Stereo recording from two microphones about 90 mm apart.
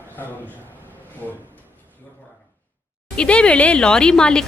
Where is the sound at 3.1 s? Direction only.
10° left (ahead or behind).